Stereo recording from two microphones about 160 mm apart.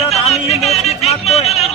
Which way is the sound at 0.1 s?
40° left (ahead or behind).